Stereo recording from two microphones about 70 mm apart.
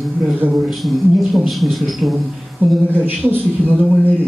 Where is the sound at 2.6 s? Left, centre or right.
Right.